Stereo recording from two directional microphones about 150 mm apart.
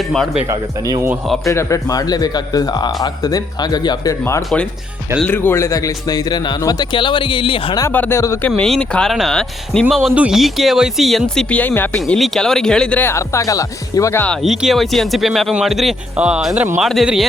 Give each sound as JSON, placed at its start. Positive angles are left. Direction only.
{"t": 0.1, "sound": "speech", "side_deg": 0}
{"t": 0.4, "sound": "speech", "side_deg": -25}
{"t": 1.5, "sound": "speech", "side_deg": 20}
{"t": 7.8, "sound": "speech", "side_deg": 15}
{"t": 8.4, "sound": "speech", "side_deg": 5}
{"t": 14.4, "sound": "speech", "side_deg": 0}